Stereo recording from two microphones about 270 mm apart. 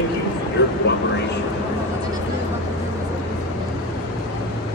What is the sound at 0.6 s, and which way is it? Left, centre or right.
Vehicle, left.